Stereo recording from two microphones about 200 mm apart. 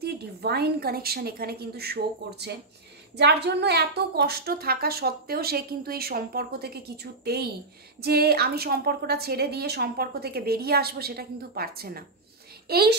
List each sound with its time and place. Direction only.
0.0 s a woman's voice: 55° right (ahead or behind)